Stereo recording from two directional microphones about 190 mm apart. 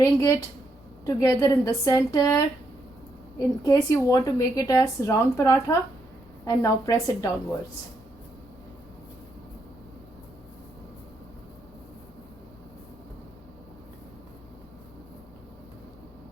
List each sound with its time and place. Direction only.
0.0 s a woman's voice: 15° left (ahead or behind)